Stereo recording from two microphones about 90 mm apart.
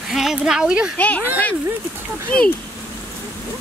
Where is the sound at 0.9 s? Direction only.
15° left (ahead or behind).